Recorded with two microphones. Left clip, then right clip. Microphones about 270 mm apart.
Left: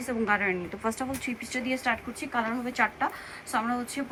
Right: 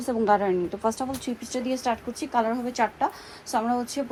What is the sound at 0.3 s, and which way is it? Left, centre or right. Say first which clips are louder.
Speech: right 5 dB; centre.